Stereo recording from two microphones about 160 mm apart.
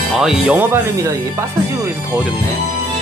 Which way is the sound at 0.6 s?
15° right (ahead or behind).